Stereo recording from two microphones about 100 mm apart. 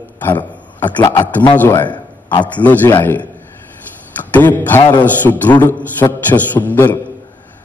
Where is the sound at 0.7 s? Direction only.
15° left (ahead or behind).